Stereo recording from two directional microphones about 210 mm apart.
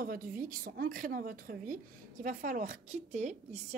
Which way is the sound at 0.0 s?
40° right (ahead or behind).